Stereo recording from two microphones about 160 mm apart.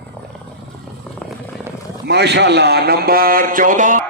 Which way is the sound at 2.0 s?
90° right.